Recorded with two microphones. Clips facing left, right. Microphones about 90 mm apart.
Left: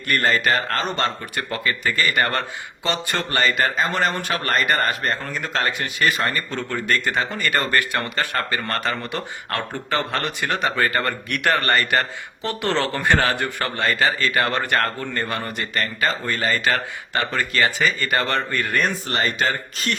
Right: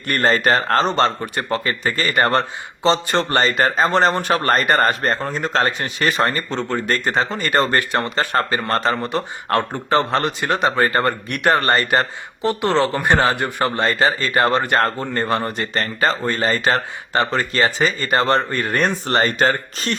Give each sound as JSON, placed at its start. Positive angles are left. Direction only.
{"t": 0.1, "sound": "a man's voice", "side_deg": -35}
{"t": 18.7, "sound": "speech", "side_deg": -35}